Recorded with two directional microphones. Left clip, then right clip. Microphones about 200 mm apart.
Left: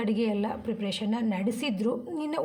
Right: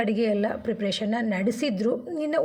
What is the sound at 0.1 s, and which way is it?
A woman's voice, 10° right (ahead or behind).